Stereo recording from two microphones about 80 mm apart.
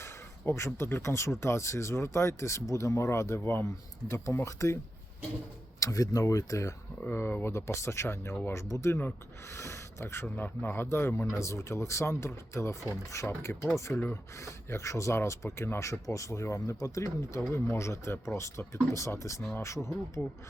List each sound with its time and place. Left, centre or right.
0.0 s speech: left
5.8 s speech: left
7.0 s speech: left